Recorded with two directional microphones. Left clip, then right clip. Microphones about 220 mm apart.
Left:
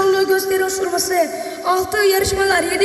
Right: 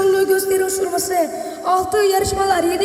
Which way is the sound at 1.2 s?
Centre (ahead or behind).